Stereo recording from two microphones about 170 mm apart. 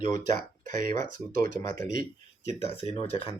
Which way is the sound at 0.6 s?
55° right (ahead or behind).